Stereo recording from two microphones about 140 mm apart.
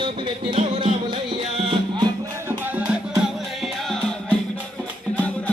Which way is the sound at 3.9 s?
5° left (ahead or behind).